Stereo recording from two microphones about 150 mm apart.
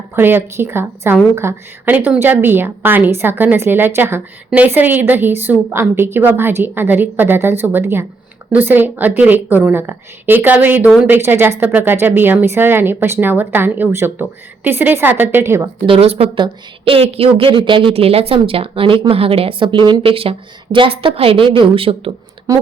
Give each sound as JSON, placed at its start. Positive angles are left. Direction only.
{"t": 0.2, "sound": "a woman's voice", "side_deg": -15}
{"t": 15.9, "sound": "a woman's voice", "side_deg": -40}